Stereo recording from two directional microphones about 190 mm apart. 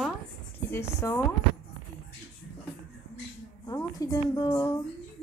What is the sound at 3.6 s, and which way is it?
A woman's voice, 20° left (ahead or behind).